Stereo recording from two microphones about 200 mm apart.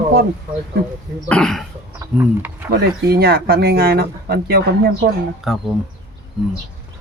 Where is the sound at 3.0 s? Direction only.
50° right (ahead or behind).